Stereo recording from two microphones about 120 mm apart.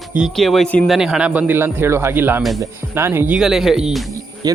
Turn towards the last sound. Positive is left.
turn(degrees=-5)  # may be behind; listen again after turning